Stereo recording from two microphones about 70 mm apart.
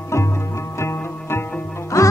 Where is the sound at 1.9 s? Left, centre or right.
Left.